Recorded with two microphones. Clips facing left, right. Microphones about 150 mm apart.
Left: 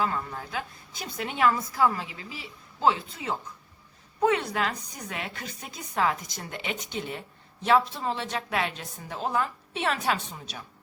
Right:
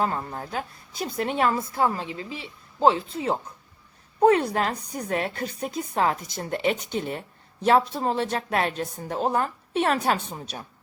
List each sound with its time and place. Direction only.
0.0 s a woman's voice: 35° right (ahead or behind)
4.8 s a woman's voice: 60° right (ahead or behind)
5.0 s a woman's voice: 35° right (ahead or behind)